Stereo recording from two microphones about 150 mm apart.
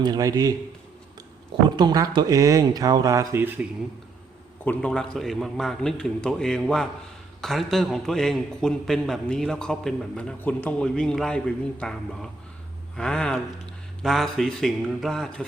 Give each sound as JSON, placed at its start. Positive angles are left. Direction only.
{"t": 0.0, "sound": "speech", "side_deg": -25}
{"t": 1.7, "sound": "speech", "side_deg": -30}
{"t": 4.6, "sound": "a man's voice", "side_deg": 10}